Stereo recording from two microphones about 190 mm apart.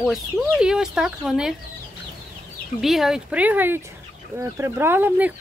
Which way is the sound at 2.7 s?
Centre (ahead or behind).